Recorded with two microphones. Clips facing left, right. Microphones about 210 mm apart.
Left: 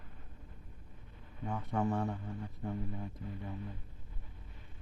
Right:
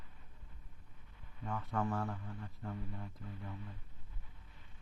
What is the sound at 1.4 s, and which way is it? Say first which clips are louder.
Speech: left 4 dB; 20° left (ahead or behind).